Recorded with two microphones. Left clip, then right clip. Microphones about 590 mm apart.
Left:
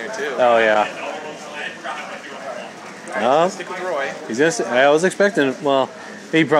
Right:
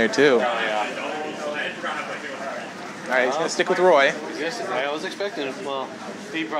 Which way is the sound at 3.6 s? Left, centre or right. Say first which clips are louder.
Right 7 dB; right.